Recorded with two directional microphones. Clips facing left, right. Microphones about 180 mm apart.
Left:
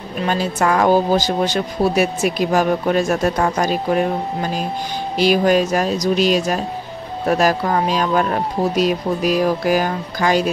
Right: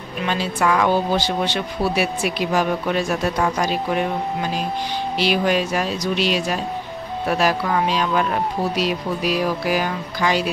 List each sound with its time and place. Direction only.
0.2 s speech: 45° left (ahead or behind)